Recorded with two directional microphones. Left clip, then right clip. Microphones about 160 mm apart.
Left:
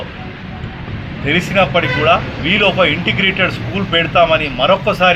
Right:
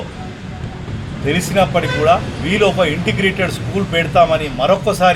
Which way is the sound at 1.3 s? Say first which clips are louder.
Left 2 dB; 20° right (ahead or behind).